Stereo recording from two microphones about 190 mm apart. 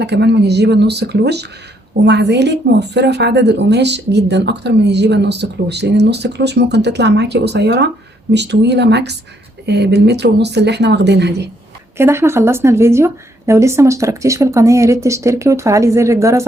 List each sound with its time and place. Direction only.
0.0 s a woman's voice: 65° right (ahead or behind)
11.9 s a woman's voice: 15° right (ahead or behind)